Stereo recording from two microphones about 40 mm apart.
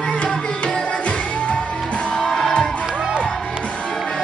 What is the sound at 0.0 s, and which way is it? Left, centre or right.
Tabla, left.